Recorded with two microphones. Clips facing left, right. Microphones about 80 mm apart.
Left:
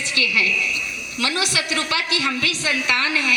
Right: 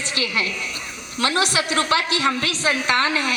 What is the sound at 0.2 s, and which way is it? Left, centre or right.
A woman's voice, right.